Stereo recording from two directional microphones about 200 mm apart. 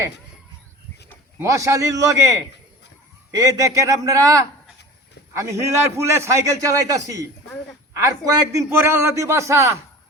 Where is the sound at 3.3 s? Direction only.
15° right (ahead or behind).